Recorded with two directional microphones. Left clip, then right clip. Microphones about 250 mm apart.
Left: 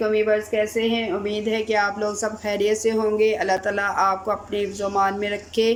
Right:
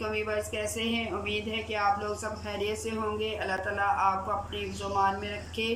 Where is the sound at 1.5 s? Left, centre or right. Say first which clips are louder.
Left 7 dB; left.